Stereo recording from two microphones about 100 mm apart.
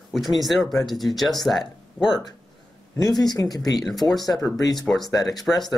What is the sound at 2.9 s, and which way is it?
Speech, 40° left (ahead or behind).